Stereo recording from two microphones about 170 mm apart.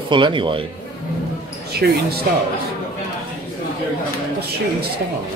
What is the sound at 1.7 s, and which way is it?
Speech, 70° right (ahead or behind).